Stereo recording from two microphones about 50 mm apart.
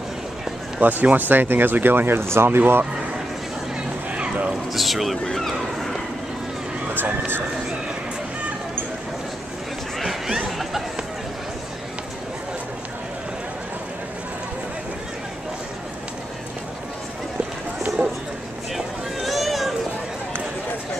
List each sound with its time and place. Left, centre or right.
0.7 s speech: right
4.1 s a sound: right
4.7 s speech: centre
6.9 s speech: right
9.9 s chatter: centre
18.8 s run: centre